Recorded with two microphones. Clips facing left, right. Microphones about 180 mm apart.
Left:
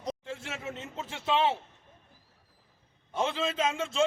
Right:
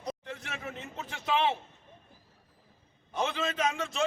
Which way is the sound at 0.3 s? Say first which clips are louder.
Left 2 dB; 25° left (ahead or behind).